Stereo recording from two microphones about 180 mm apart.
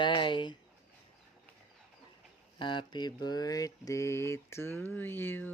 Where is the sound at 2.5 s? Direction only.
25° left (ahead or behind).